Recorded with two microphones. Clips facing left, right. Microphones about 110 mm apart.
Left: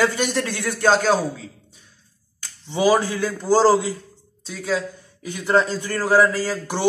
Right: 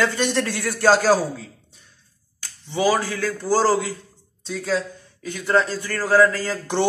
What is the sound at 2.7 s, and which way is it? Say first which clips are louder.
A man's voice: left 2 dB; 20° left (ahead or behind).